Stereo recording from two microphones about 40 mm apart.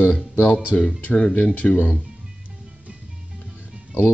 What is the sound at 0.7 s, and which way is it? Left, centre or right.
Speech, left.